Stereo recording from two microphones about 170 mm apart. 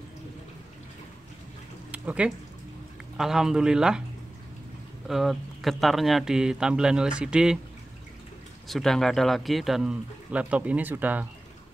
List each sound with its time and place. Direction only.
1.9 s a sound: 5° right (ahead or behind)
3.2 s speech: 5° right (ahead or behind)
5.0 s speech: centre (ahead or behind)
8.6 s speech: centre (ahead or behind)